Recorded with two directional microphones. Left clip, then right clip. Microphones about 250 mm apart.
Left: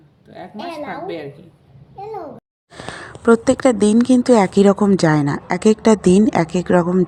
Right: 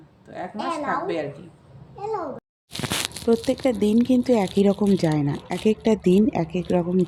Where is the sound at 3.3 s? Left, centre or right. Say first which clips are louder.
Left 8 dB; centre.